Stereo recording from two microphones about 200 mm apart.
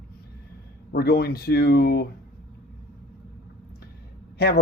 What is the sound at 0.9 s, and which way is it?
Speech, 50° left (ahead or behind).